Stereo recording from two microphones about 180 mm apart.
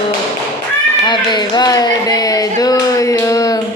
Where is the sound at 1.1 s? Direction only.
25° left (ahead or behind).